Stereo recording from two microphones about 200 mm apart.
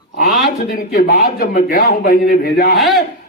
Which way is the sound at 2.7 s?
Centre (ahead or behind).